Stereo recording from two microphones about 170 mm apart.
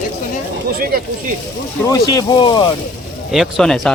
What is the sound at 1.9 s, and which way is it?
Speech, 25° left (ahead or behind).